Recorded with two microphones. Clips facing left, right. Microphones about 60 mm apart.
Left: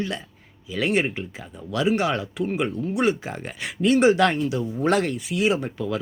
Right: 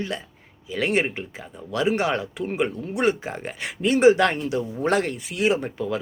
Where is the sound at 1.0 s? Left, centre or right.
Right.